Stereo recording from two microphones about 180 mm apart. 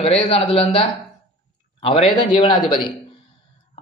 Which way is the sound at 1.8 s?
25° left (ahead or behind).